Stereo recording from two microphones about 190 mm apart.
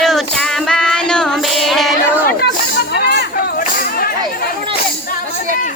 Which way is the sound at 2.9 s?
60° left (ahead or behind).